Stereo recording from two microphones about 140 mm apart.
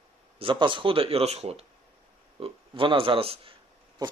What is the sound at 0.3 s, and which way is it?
Speech, 35° right (ahead or behind).